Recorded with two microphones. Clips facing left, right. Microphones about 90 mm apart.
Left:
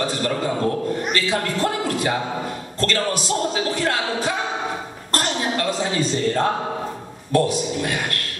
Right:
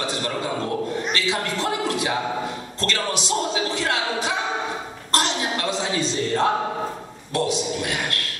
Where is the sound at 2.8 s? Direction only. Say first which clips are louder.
Left 3 dB; 50° left (ahead or behind).